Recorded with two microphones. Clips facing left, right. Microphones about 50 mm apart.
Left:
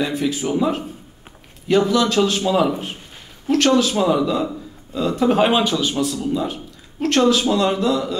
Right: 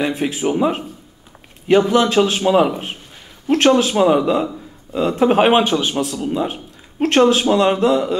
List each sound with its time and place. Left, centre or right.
0.0 s a man's voice: right